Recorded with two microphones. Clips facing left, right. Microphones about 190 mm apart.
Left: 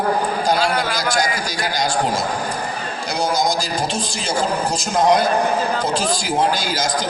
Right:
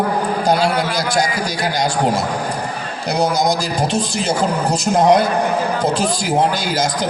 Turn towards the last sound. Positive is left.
turn(degrees=-60)  # may be behind; listen again after turning